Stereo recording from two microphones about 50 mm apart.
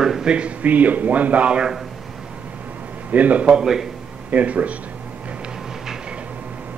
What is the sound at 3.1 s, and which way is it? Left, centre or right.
Speech, right.